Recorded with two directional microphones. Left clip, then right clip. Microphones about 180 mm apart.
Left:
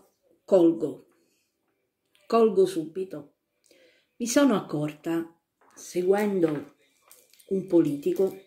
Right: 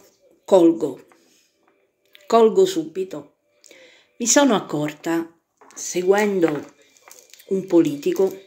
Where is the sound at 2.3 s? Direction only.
15° left (ahead or behind).